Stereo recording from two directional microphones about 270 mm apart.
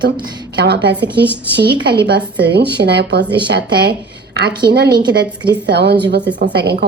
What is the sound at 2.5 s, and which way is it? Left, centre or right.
Speech, right.